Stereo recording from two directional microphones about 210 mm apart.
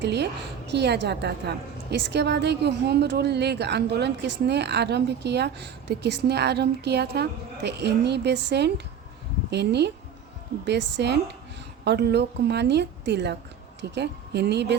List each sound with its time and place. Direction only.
0.0 s a woman's voice: 55° right (ahead or behind)